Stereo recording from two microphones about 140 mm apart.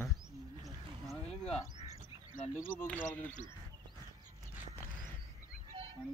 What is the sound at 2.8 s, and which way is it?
Speech, 15° left (ahead or behind).